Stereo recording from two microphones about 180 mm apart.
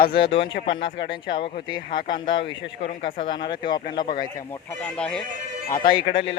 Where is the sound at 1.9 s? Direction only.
25° left (ahead or behind).